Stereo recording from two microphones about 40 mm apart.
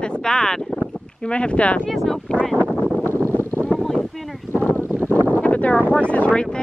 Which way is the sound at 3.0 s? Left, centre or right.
Left.